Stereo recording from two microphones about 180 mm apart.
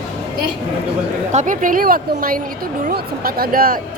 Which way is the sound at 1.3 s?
45° right (ahead or behind).